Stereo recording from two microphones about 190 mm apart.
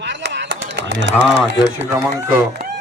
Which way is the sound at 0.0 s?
70° right (ahead or behind).